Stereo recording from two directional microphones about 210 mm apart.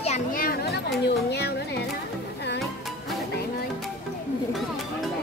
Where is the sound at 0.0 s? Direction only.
35° left (ahead or behind).